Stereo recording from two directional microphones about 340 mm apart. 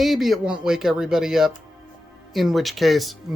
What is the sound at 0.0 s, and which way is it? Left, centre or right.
Speech, centre.